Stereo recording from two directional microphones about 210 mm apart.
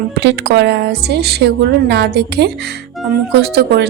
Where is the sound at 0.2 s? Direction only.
55° right (ahead or behind).